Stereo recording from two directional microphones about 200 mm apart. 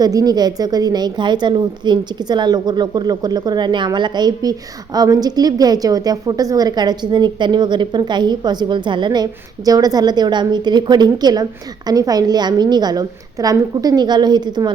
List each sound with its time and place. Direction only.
0.0 s a woman's voice: 20° right (ahead or behind)